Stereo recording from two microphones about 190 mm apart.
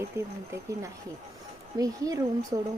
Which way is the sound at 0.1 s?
15° right (ahead or behind).